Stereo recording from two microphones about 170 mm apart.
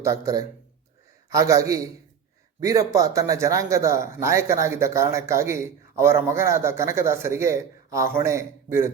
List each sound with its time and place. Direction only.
0.0 s a man's voice: 20° right (ahead or behind)